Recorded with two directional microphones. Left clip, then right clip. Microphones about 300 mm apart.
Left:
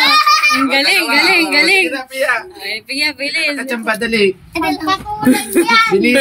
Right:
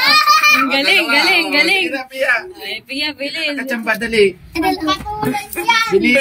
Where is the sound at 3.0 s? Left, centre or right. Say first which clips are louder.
Left 4 dB; left.